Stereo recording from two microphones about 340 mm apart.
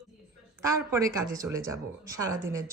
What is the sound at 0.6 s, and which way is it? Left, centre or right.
Speech, centre.